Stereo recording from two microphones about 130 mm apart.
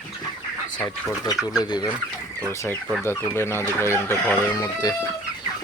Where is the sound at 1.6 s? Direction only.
30° left (ahead or behind).